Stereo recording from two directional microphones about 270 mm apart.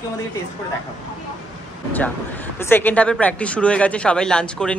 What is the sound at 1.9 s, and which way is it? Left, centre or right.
A man's voice, centre.